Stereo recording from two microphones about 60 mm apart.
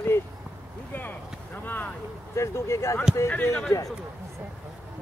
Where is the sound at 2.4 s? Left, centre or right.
Left.